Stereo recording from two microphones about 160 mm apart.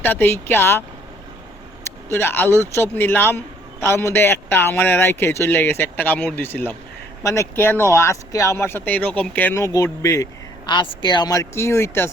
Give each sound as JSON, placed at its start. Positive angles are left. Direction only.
{"t": 0.0, "sound": "a man's voice", "side_deg": 15}
{"t": 2.0, "sound": "a man's voice", "side_deg": 15}